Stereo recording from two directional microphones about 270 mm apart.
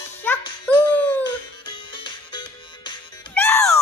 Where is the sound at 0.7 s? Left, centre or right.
Centre.